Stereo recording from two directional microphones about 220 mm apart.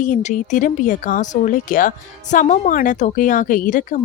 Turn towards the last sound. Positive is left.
turn(degrees=35)  # may be behind; listen again after turning